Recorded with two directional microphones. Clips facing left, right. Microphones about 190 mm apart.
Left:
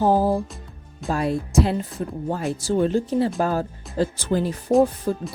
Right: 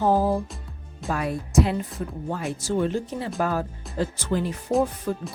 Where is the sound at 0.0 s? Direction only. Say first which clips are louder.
Left 2 dB; 30° left (ahead or behind).